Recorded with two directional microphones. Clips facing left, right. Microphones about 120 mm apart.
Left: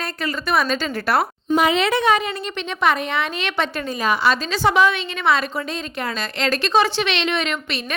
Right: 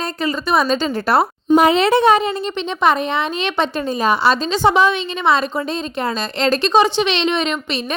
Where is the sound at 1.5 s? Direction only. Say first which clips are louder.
Right 5 dB; 40° right (ahead or behind); by 7.8 s 25° right (ahead or behind).